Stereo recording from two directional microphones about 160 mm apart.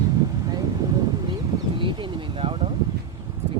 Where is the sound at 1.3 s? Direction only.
30° right (ahead or behind).